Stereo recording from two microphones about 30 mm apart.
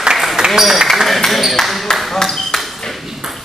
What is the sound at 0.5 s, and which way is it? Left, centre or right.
Speech, centre.